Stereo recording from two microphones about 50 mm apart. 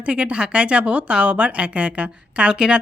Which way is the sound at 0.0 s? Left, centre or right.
Right.